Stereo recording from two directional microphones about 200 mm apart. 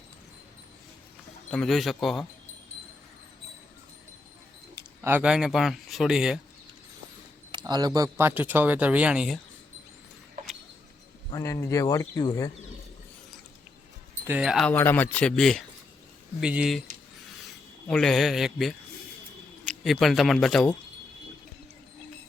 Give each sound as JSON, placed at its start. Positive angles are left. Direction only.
{"t": 1.5, "sound": "speech", "side_deg": 5}
{"t": 5.0, "sound": "speech", "side_deg": -5}
{"t": 7.5, "sound": "speech", "side_deg": -20}
{"t": 11.3, "sound": "speech", "side_deg": 15}
{"t": 14.3, "sound": "speech", "side_deg": -5}
{"t": 14.7, "sound": "speech", "side_deg": 10}
{"t": 17.8, "sound": "speech", "side_deg": 5}